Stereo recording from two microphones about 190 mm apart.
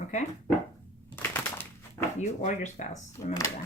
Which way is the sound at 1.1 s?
10° left (ahead or behind).